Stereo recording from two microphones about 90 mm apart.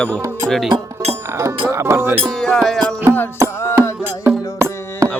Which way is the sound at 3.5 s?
30° left (ahead or behind).